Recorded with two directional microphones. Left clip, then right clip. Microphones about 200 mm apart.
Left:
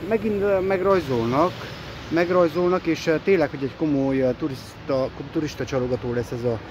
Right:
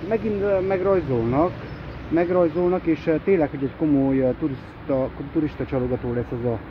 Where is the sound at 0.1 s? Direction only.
20° left (ahead or behind).